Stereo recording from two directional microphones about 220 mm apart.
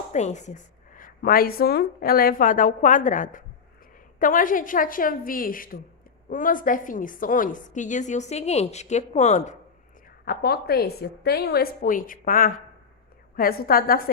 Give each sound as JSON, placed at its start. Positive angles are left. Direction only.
{"t": 0.1, "sound": "a woman's voice", "side_deg": 30}
{"t": 10.2, "sound": "a woman's voice", "side_deg": 45}